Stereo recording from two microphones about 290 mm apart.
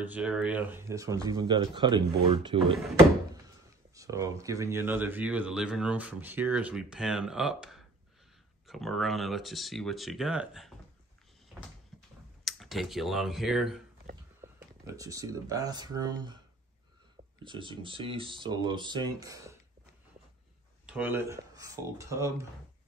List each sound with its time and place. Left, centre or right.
0.0 s speech: centre
2.6 s speech: centre
3.9 s speech: centre
11.9 s tick-tock: centre
12.4 s speech: centre
14.9 s speech: centre
17.5 s speech: centre
20.8 s speech: centre